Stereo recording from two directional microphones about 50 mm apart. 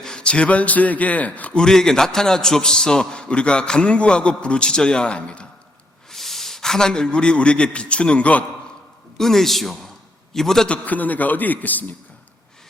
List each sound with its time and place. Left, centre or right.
0.0 s speech: centre
1.5 s a man's voice: centre
6.1 s a man's voice: centre; by 8.4 s left
9.1 s a man's voice: centre
10.7 s a man's voice: left